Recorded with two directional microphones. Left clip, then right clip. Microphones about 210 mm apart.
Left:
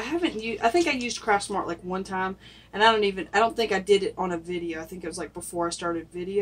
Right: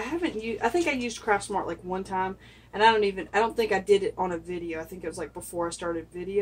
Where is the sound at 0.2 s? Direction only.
10° left (ahead or behind).